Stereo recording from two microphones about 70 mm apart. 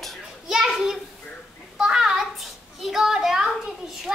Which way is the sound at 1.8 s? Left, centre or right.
Centre.